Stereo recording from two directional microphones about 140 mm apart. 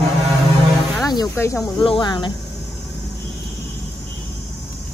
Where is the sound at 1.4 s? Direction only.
20° left (ahead or behind).